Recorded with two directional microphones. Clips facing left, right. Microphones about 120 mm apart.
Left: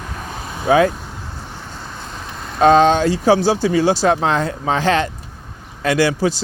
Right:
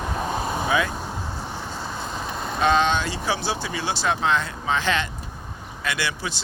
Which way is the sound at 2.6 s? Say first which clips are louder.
Left 9 dB; 40° left (ahead or behind).